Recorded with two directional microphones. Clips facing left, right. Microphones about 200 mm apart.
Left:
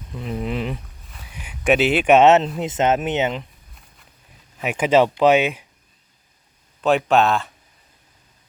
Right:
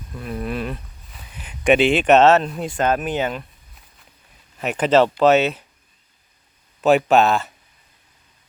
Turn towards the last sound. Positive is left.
turn(degrees=-5)  # may be behind; listen again after turning